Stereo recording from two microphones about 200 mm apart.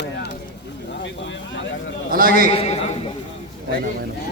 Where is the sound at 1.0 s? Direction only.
65° left (ahead or behind).